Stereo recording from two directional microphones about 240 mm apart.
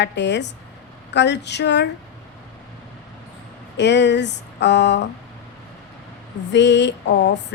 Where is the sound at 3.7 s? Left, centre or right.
Left.